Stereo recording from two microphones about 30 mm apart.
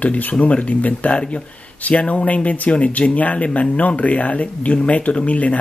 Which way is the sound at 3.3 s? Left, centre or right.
Left.